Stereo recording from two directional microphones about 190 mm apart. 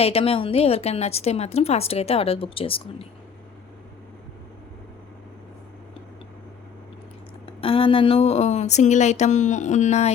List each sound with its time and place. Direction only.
0.0 s a woman's voice: 30° left (ahead or behind)
7.6 s a woman's voice: 30° left (ahead or behind)